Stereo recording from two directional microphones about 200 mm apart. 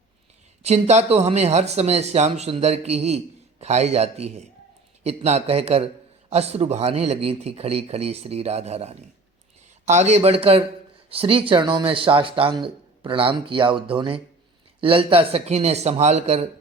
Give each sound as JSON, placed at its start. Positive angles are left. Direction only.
{"t": 0.6, "sound": "a man's voice", "side_deg": -35}